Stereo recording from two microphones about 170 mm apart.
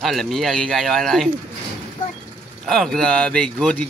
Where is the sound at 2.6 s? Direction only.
Centre (ahead or behind).